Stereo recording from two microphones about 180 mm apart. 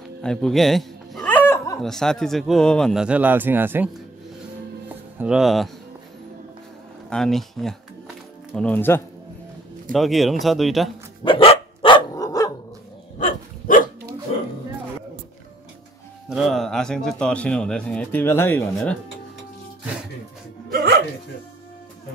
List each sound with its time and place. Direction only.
0.2 s music: 5° left (ahead or behind)
1.8 s speech: centre (ahead or behind)
4.8 s music: 5° right (ahead or behind)
7.1 s speech: 5° left (ahead or behind)
9.9 s speech: centre (ahead or behind)
11.2 s dog: 30° left (ahead or behind)
13.2 s dog: 50° left (ahead or behind)
16.3 s speech: centre (ahead or behind)
20.7 s music: 65° right (ahead or behind)